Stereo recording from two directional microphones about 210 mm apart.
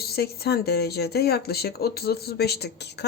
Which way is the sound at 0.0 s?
50° left (ahead or behind).